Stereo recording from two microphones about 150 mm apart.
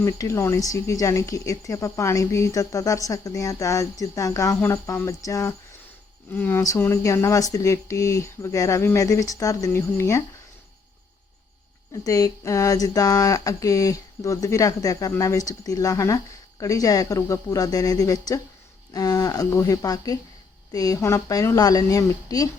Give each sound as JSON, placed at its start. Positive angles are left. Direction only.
{"t": 0.0, "sound": "speech", "side_deg": 20}
{"t": 6.3, "sound": "speech", "side_deg": 10}
{"t": 12.0, "sound": "speech", "side_deg": 25}